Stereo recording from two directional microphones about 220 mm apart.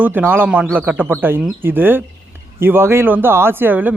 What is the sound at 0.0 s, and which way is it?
Speech, 10° right (ahead or behind).